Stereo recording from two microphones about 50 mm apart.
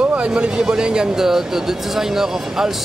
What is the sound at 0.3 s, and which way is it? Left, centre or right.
Speech, centre.